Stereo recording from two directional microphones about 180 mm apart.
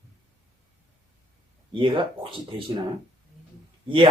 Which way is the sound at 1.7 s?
25° right (ahead or behind).